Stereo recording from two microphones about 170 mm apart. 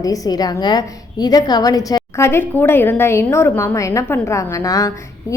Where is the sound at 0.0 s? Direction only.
20° left (ahead or behind).